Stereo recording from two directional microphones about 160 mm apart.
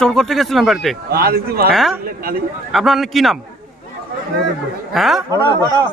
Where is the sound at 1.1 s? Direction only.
75° right (ahead or behind).